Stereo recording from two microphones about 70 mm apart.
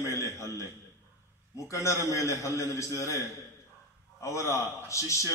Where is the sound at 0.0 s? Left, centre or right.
Left.